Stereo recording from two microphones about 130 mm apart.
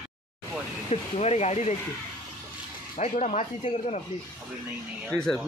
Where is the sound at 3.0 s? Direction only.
60° left (ahead or behind).